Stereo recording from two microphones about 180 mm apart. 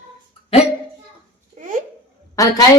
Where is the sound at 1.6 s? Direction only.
50° right (ahead or behind).